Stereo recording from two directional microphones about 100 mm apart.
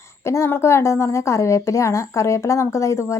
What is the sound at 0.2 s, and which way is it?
Speech, 25° left (ahead or behind).